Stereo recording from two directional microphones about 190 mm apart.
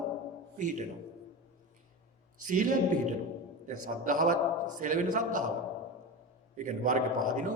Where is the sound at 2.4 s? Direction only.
45° right (ahead or behind).